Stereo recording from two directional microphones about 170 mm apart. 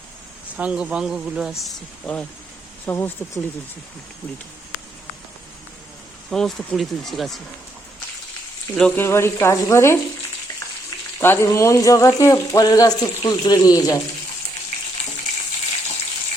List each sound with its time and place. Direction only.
0.5 s speech: 5° right (ahead or behind)
2.8 s speech: 15° left (ahead or behind)
6.3 s speech: centre (ahead or behind)
8.7 s speech: 5° left (ahead or behind)
11.2 s speech: 15° left (ahead or behind)